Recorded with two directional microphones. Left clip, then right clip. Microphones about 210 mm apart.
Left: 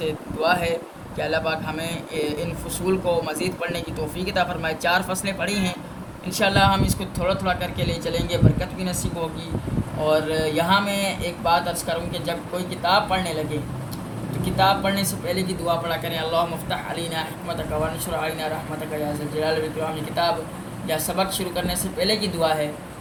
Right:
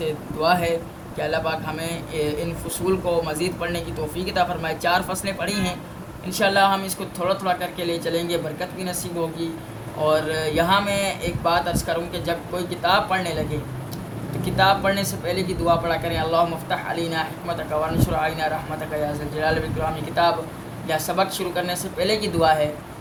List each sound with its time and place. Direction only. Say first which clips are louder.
0.0 s a sound: right 1 dB; 15° right (ahead or behind)
1.2 s speech: even; 15° right (ahead or behind)
10.0 s speech: even; 15° right (ahead or behind)
14.4 s speech: right 1 dB; 15° right (ahead or behind)
20.8 s speech: right 2 dB; 10° right (ahead or behind)